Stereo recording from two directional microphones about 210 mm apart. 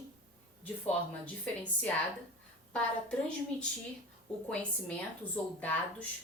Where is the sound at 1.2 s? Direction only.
5° left (ahead or behind).